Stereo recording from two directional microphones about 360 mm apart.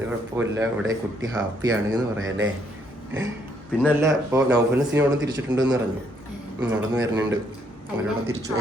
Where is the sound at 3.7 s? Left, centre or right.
Centre.